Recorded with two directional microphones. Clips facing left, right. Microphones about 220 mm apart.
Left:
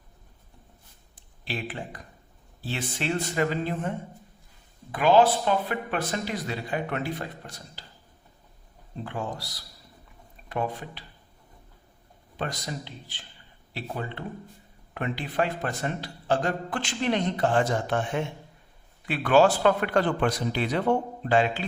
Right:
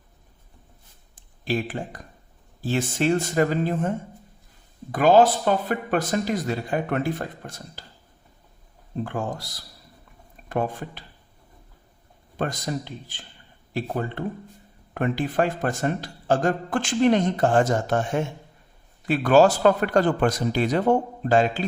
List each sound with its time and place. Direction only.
1.5 s a man's voice: 45° right (ahead or behind)
9.0 s a man's voice: 50° right (ahead or behind)
10.5 s a man's voice: 45° right (ahead or behind)
12.4 s a man's voice: 50° right (ahead or behind)